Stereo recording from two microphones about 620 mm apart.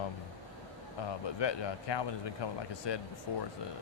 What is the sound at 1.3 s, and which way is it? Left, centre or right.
Speech, left.